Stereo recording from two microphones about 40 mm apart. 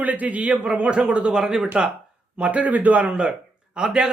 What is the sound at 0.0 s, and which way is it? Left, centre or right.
Speech, right.